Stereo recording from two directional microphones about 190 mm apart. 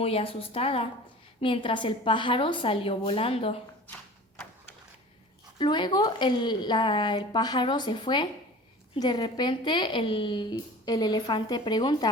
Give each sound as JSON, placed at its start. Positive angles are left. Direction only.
{"t": 0.0, "sound": "speech", "side_deg": 30}
{"t": 5.5, "sound": "speech", "side_deg": 25}